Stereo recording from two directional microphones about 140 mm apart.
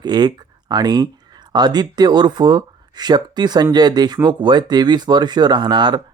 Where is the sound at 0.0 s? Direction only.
30° right (ahead or behind).